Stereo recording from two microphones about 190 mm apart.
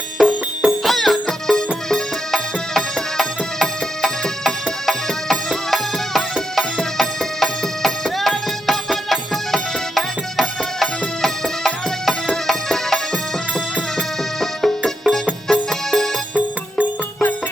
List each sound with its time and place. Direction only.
0.2 s music: centre (ahead or behind)
14.6 s music: centre (ahead or behind)